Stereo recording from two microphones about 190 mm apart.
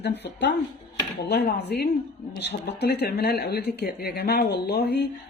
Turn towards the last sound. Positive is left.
turn(degrees=60)  # may be behind; listen again after turning